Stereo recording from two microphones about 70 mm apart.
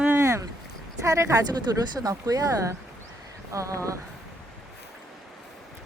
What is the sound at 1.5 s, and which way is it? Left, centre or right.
Speech, right.